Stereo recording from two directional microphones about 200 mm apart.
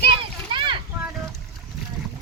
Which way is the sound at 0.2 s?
25° right (ahead or behind).